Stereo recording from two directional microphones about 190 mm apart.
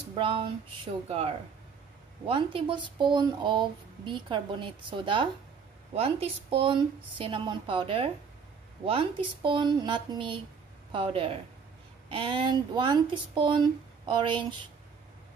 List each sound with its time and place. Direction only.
0.1 s speech: 30° right (ahead or behind)